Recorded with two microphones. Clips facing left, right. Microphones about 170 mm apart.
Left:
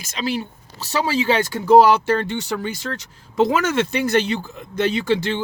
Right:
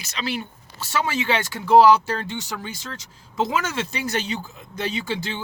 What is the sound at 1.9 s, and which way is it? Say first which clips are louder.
Speech: left 1 dB; 60° left (ahead or behind).